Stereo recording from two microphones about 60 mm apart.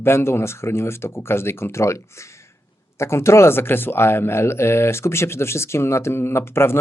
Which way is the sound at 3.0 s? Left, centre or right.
Left.